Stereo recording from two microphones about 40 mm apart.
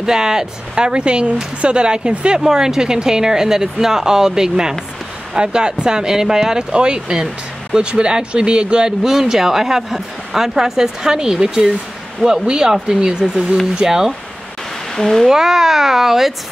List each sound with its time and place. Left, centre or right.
0.0 s speech: centre
9.0 s speech: centre
15.0 s speech: centre
15.2 s speech: centre